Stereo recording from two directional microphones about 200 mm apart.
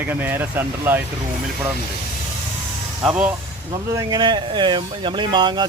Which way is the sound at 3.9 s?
15° right (ahead or behind).